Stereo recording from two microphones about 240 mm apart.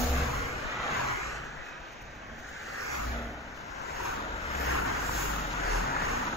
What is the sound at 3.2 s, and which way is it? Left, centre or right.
Vehicle, centre.